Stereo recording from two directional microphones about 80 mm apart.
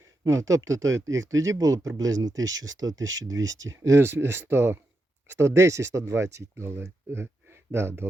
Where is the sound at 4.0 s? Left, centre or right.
Right.